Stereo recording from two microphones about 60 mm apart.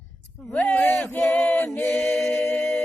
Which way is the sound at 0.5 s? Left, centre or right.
Left.